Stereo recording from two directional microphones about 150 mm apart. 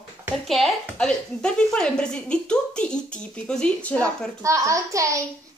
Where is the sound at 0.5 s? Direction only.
Centre (ahead or behind).